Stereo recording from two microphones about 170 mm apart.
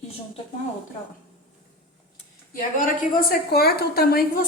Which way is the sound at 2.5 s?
55° left (ahead or behind).